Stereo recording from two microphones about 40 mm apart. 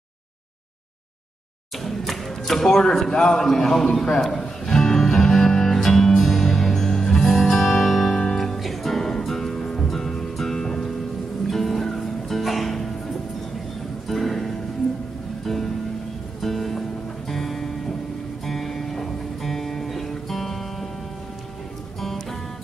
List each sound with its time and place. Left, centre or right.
1.8 s speech: centre
4.2 s music: centre
14.0 s music: centre